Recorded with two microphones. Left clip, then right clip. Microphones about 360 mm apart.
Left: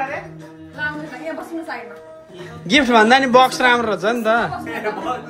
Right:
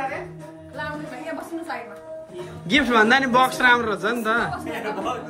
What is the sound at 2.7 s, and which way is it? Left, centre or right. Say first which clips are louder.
A man's voice: left 5 dB; centre.